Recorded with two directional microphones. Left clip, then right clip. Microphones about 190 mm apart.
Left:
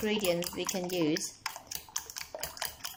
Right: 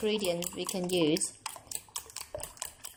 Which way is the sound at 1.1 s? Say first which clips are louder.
Even; 25° right (ahead or behind).